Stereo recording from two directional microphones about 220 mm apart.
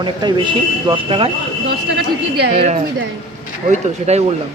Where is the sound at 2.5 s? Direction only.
25° right (ahead or behind).